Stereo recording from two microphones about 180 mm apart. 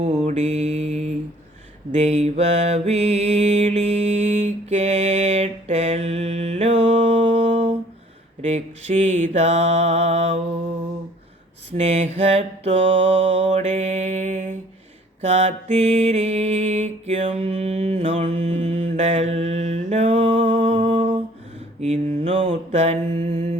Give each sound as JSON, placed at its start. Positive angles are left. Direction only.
{"t": 0.0, "sound": "mantra", "side_deg": -40}
{"t": 11.8, "sound": "mantra", "side_deg": -35}